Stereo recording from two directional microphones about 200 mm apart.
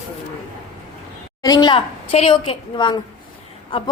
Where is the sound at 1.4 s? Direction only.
20° left (ahead or behind).